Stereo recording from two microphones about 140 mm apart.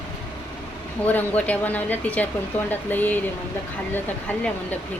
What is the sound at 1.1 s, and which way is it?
Speech, 10° left (ahead or behind).